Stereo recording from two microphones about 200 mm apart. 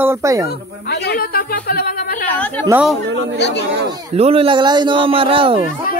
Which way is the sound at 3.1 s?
65° right (ahead or behind).